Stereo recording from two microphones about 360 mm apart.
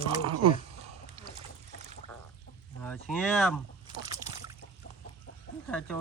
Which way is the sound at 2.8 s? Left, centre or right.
Centre.